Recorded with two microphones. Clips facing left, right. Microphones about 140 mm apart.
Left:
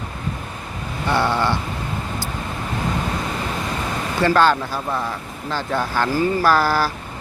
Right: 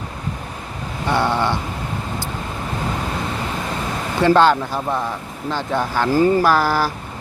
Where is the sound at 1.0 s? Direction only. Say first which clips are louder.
Right 1 dB; 15° right (ahead or behind).